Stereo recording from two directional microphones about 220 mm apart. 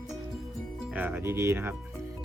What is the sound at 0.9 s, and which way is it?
Speech, 10° right (ahead or behind).